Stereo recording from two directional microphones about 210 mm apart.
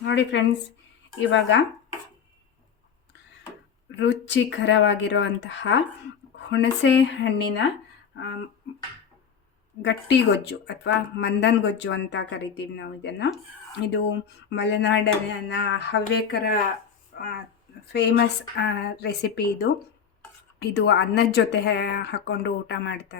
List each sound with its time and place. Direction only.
0.0 s speech: 60° left (ahead or behind)
3.9 s speech: 60° left (ahead or behind)
8.7 s speech: 50° left (ahead or behind)
9.8 s speech: 55° left (ahead or behind)